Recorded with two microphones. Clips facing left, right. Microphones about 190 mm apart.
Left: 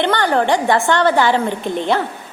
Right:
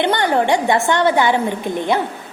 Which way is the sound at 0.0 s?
20° right (ahead or behind).